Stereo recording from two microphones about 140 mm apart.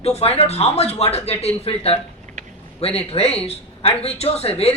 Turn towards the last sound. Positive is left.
turn(degrees=45)  # may be behind; listen again after turning